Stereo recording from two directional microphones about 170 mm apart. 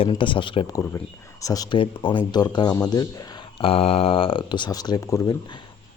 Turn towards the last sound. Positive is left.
turn(degrees=20)  # may be behind; listen again after turning